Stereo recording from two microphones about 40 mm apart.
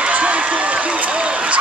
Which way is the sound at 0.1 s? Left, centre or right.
Right.